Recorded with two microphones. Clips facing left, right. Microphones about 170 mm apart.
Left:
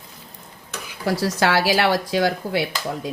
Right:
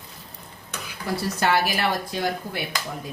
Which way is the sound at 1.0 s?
90° left.